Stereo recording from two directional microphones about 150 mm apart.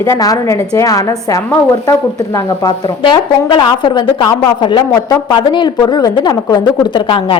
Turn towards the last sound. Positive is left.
turn(degrees=35)  # may be behind; listen again after turning